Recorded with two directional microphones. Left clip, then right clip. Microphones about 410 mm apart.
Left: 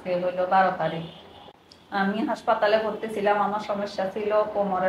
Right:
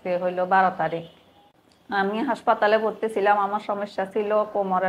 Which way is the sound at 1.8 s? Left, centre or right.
Right.